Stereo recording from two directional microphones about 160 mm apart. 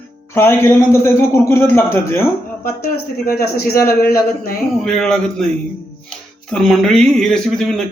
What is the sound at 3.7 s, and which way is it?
Speech, 70° left (ahead or behind).